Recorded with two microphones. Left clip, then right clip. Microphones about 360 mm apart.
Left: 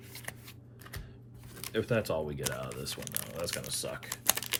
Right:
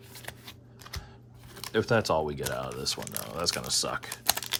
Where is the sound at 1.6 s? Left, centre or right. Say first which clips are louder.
Right 5 dB; centre.